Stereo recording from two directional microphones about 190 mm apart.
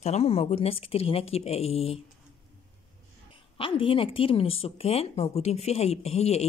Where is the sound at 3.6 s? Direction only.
30° left (ahead or behind).